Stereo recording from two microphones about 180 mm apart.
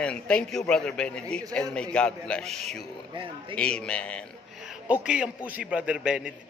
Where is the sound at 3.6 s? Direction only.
5° left (ahead or behind).